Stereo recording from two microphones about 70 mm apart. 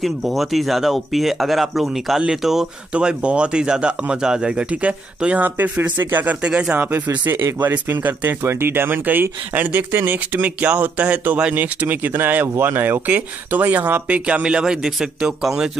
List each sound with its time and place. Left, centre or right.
0.0 s speech: centre; by 6.3 s right
6.4 s speech: centre
6.8 s speech: right; by 15.7 s centre